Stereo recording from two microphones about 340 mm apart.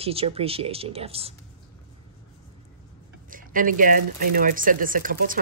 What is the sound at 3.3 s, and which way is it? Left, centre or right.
Speech, right.